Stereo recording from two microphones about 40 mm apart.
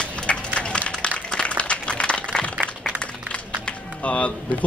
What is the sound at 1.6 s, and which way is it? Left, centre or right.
Applause, left.